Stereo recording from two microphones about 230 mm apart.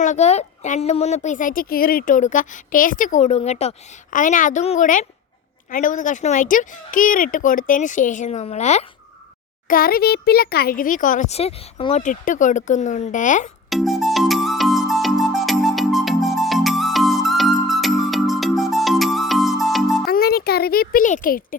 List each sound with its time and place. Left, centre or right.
0.0 s a woman's voice: left
13.7 s music: centre
20.1 s a child's voice: left